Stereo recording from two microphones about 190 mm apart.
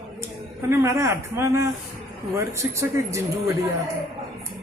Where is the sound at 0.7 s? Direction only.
15° right (ahead or behind).